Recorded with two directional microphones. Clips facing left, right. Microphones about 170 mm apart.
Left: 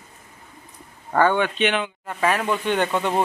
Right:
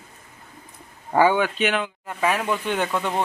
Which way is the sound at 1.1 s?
5° right (ahead or behind).